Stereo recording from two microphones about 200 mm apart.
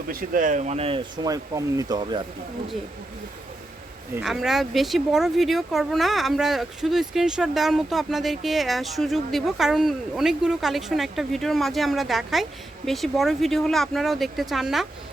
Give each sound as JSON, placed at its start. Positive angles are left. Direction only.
{"t": 0.1, "sound": "speech", "side_deg": -45}
{"t": 4.2, "sound": "speech", "side_deg": 0}